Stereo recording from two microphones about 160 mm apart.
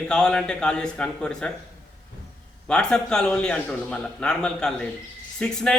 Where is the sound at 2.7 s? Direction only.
5° left (ahead or behind).